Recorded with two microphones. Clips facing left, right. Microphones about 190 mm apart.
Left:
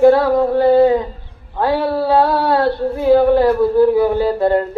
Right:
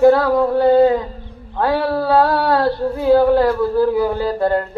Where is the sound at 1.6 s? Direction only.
20° left (ahead or behind).